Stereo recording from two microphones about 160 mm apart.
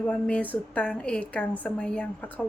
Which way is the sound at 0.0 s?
5° left (ahead or behind).